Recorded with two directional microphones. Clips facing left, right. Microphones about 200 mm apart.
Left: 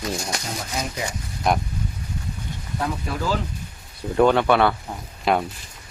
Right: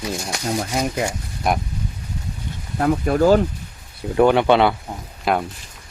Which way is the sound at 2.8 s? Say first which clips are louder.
Right 11 dB; 50° right (ahead or behind).